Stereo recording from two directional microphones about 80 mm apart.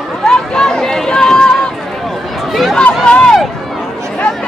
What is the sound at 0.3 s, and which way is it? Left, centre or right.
Run, centre.